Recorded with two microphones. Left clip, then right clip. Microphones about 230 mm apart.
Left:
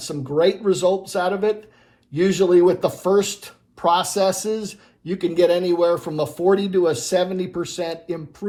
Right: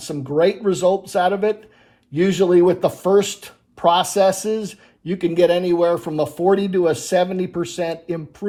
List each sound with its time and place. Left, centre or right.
0.0 s speech: right